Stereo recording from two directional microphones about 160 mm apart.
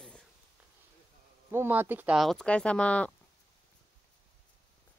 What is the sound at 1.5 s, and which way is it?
Speech, 15° right (ahead or behind).